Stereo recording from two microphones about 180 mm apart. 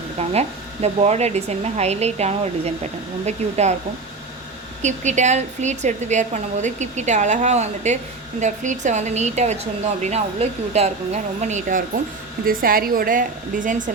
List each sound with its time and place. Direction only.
0.2 s speech: 35° right (ahead or behind)
4.8 s speech: 40° right (ahead or behind)
12.5 s a woman's voice: 55° right (ahead or behind)